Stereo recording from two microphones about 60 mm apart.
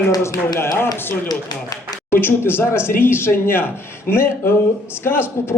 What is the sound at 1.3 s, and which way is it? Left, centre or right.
Speech, left.